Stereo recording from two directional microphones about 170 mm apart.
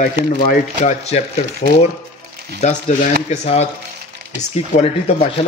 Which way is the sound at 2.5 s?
45° left (ahead or behind).